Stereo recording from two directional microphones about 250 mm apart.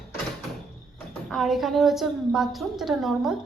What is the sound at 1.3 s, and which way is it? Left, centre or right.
A woman's voice, centre.